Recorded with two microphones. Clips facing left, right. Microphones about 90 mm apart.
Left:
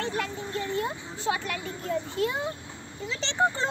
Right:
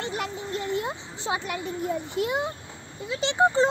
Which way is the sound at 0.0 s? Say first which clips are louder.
Even; 20° right (ahead or behind).